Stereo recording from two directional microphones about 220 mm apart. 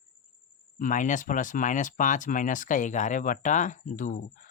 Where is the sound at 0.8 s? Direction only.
35° left (ahead or behind).